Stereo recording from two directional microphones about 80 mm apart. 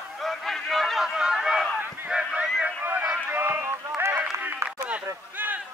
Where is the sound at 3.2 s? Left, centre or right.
Right.